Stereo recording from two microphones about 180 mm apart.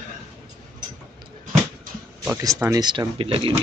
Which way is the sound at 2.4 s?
20° right (ahead or behind).